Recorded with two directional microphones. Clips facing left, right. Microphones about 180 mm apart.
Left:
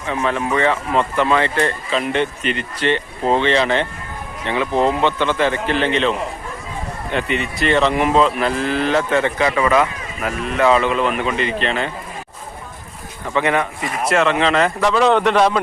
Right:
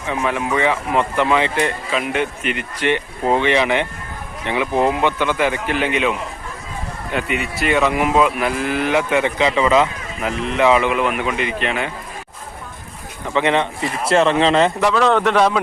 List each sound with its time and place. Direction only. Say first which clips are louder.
0.1 s speech: left 1 dB; 10° right (ahead or behind)
13.3 s speech: right 1 dB; 20° right (ahead or behind)
14.9 s a man's voice: left 2 dB; centre (ahead or behind)